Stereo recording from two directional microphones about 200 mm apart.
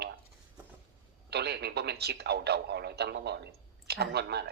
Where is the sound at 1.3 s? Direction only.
55° right (ahead or behind).